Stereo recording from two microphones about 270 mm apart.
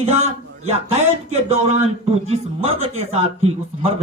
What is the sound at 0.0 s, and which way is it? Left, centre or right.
A man's voice, right.